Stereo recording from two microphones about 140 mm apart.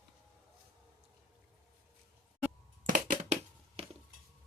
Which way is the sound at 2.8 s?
70° right (ahead or behind).